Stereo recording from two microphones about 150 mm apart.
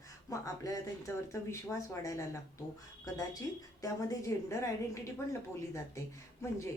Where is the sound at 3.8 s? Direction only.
20° left (ahead or behind).